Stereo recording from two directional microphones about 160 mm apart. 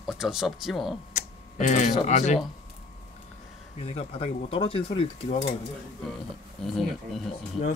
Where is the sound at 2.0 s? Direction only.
45° left (ahead or behind).